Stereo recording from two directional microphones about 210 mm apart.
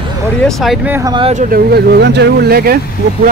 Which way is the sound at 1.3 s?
45° right (ahead or behind).